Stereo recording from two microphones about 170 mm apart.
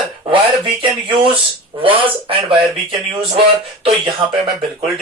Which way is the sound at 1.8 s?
30° right (ahead or behind).